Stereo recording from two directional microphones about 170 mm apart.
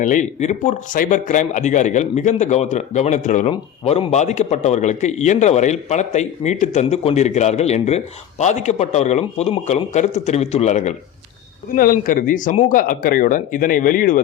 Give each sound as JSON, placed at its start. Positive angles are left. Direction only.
{"t": 0.0, "sound": "a man's voice", "side_deg": 45}
{"t": 11.8, "sound": "a man's voice", "side_deg": 55}